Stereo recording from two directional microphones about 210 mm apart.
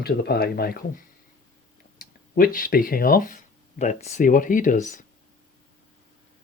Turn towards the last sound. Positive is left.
turn(degrees=35)  # may be behind; listen again after turning